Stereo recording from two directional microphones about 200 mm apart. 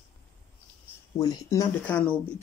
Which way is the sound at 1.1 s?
15° left (ahead or behind).